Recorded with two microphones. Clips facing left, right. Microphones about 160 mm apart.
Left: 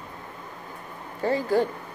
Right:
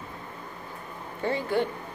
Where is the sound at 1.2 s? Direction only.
40° left (ahead or behind).